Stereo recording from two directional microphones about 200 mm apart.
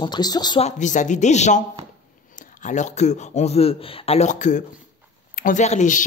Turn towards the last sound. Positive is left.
turn(degrees=40)  # may be behind; listen again after turning